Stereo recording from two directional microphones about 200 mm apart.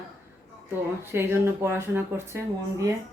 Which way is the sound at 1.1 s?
10° right (ahead or behind).